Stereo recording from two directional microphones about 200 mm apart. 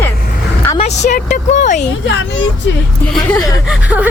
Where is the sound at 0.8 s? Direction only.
35° left (ahead or behind).